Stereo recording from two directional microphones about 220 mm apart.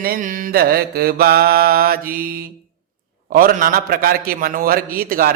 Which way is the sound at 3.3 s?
40° right (ahead or behind).